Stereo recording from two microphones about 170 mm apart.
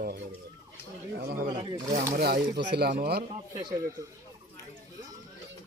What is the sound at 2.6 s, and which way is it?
Speech, 80° right.